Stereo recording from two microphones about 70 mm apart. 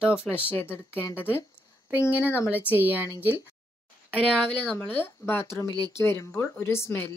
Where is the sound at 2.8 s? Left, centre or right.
Right.